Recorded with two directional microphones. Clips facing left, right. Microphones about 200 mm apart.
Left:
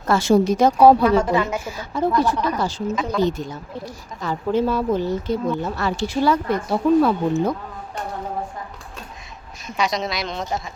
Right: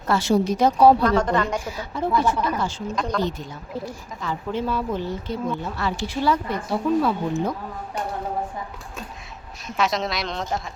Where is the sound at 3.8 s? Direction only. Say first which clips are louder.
Left 2 dB; 40° left (ahead or behind).